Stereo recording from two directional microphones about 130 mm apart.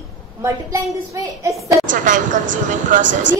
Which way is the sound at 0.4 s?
25° right (ahead or behind).